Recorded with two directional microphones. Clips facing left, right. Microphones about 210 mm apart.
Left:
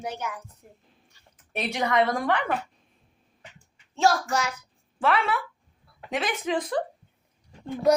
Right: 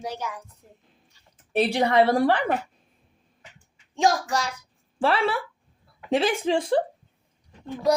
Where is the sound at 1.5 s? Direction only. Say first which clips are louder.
Right 5 dB; 30° right (ahead or behind).